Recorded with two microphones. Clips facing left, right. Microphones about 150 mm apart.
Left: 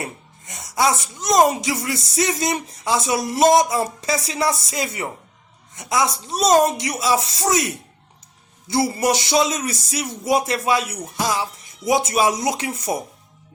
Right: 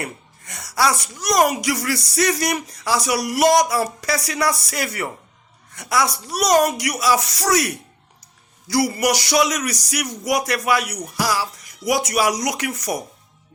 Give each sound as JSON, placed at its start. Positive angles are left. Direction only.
{"t": 0.0, "sound": "a man's voice", "side_deg": 20}